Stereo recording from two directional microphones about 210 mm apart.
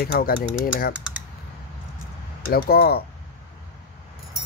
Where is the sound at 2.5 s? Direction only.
45° left (ahead or behind).